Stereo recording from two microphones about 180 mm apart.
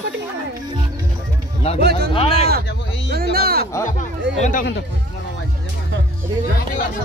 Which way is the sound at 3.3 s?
60° right (ahead or behind).